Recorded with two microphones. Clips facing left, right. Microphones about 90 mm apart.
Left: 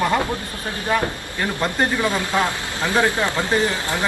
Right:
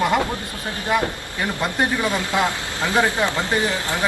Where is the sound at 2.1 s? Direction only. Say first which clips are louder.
Even; 20° right (ahead or behind).